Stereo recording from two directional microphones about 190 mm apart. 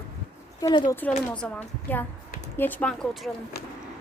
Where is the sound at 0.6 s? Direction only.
20° left (ahead or behind).